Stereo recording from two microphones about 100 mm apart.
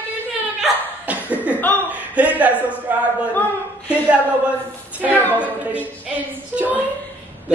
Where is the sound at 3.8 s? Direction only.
15° right (ahead or behind).